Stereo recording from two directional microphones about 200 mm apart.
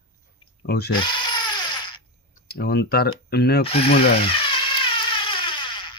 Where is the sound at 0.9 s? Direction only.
25° left (ahead or behind).